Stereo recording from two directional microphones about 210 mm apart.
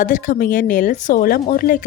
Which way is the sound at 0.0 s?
40° left (ahead or behind).